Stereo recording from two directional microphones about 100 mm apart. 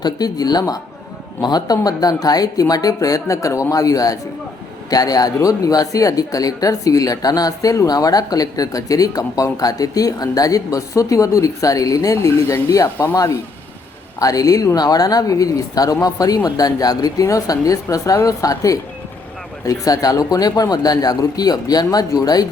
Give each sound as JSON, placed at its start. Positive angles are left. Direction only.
{"t": 0.0, "sound": "speech", "side_deg": 40}
{"t": 14.2, "sound": "speech", "side_deg": 35}